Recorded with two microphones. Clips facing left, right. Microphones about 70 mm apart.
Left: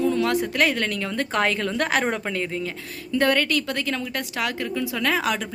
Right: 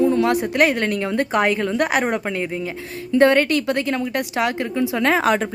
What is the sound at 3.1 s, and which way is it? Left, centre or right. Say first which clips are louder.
Speech: right 6 dB; right.